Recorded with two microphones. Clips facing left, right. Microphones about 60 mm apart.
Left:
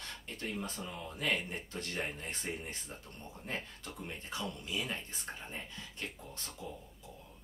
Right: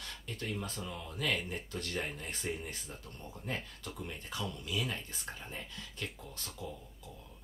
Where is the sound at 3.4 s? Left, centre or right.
Centre.